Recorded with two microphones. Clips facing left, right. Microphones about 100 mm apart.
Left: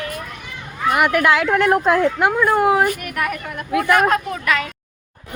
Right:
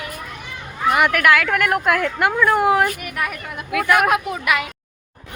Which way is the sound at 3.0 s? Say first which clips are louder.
Left 3 dB; centre (ahead or behind).